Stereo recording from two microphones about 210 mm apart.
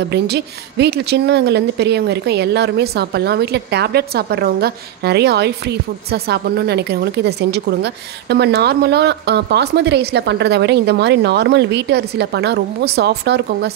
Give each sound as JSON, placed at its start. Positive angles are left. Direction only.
{"t": 0.1, "sound": "speech", "side_deg": -50}